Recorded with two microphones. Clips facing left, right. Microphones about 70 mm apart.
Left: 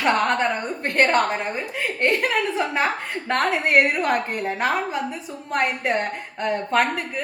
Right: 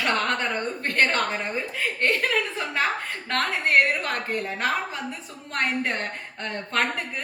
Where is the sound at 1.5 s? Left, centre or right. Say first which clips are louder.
Left 2 dB; centre.